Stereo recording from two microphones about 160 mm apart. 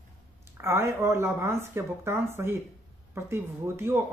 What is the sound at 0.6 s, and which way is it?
Speech, 15° right (ahead or behind).